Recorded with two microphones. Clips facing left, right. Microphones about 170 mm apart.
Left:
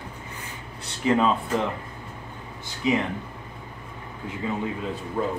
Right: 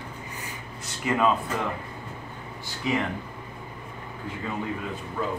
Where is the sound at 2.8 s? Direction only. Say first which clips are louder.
Left 4 dB; 20° left (ahead or behind).